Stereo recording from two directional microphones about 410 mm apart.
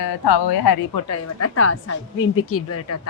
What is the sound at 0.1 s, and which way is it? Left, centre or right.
Speech, left.